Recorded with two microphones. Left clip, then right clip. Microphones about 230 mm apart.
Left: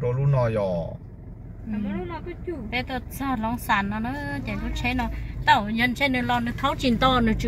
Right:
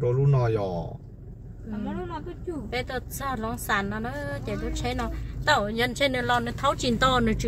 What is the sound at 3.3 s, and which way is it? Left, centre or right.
Speech, centre.